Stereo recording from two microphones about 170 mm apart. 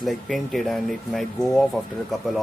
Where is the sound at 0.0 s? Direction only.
Centre (ahead or behind).